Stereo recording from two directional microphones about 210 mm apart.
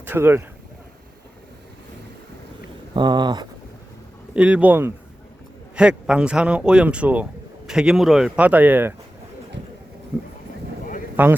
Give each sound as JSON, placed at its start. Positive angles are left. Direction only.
{"t": 0.0, "sound": "speech", "side_deg": -10}
{"t": 2.9, "sound": "speech", "side_deg": -20}
{"t": 4.4, "sound": "speech", "side_deg": -5}
{"t": 11.2, "sound": "speech", "side_deg": -10}